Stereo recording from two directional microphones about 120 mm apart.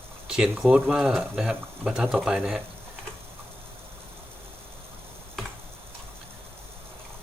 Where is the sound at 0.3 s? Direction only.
5° right (ahead or behind).